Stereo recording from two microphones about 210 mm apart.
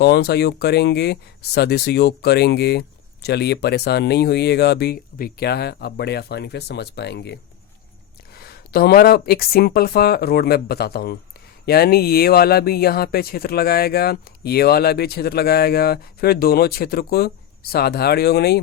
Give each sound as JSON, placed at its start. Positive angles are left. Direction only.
{"t": 0.0, "sound": "speech", "side_deg": 50}